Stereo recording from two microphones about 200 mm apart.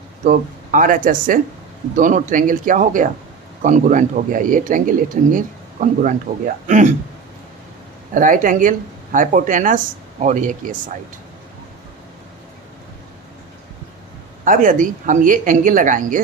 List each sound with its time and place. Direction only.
0.3 s speech: 40° right (ahead or behind)
8.1 s speech: 40° right (ahead or behind)
14.4 s speech: 40° right (ahead or behind)